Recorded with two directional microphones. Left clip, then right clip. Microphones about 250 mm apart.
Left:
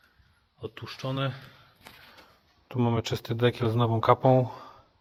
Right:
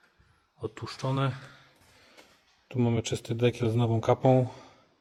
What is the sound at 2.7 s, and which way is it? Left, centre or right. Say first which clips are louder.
Speech: left 1 dB; centre.